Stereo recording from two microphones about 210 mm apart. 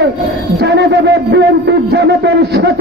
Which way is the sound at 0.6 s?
55° right (ahead or behind).